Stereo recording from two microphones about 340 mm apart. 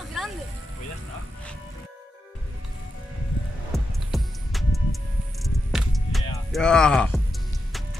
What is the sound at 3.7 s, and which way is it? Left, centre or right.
Music, centre.